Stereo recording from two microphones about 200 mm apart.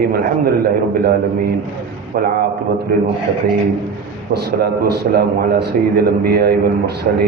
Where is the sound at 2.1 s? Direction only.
45° right (ahead or behind).